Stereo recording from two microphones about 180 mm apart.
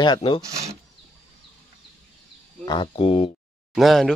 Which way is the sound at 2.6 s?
25° left (ahead or behind).